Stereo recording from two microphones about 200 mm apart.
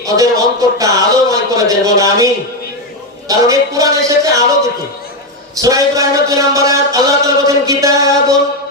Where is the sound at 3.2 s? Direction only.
15° right (ahead or behind).